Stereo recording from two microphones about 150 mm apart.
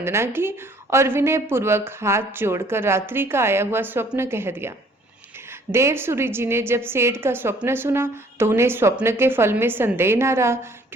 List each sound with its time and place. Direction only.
0.0 s a woman's voice: 15° right (ahead or behind)
5.7 s a woman's voice: 15° right (ahead or behind)